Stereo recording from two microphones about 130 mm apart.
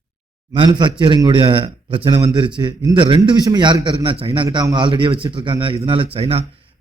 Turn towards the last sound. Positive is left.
turn(degrees=-50)  # may be behind; listen again after turning